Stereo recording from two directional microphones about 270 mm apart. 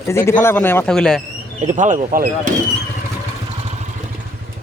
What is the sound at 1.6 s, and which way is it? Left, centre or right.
Speech, right.